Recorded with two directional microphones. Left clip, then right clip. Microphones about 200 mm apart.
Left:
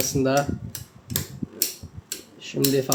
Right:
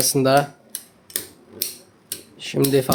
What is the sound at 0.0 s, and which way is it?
Speech, 25° right (ahead or behind).